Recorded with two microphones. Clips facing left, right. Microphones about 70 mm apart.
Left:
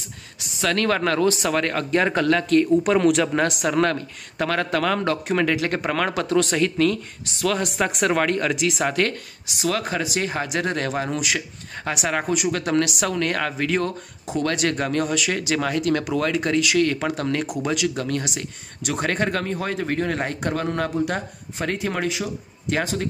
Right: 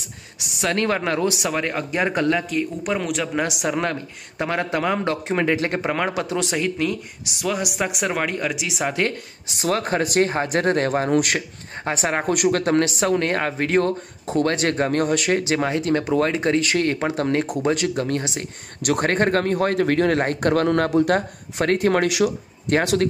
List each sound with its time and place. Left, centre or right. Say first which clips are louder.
0.6 s speech: even; right
2.8 s speech: left 6 dB; centre
3.6 s speech: left 3 dB; centre
9.5 s speech: right 2 dB; right
11.3 s speech: right 2 dB; right
12.3 s speech: right 3 dB; right
18.8 s speech: right 4 dB; right
20.2 s speech: right 6 dB; right
22.0 s speech: right 6 dB; right
22.7 s speech: right 4 dB; right